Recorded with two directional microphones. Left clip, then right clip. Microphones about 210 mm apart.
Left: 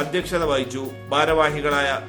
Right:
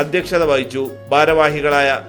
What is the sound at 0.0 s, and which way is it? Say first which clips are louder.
A man's voice: right 7 dB; 20° right (ahead or behind).